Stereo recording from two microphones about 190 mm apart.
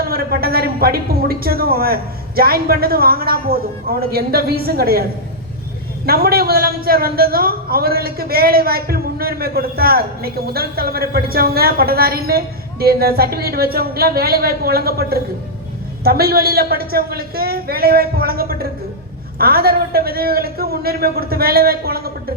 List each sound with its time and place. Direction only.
0.0 s a man's voice: 50° right (ahead or behind)
6.1 s a man's voice: 55° right (ahead or behind)